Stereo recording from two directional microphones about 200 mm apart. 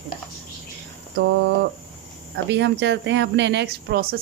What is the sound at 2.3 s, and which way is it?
A woman's voice, 65° right (ahead or behind).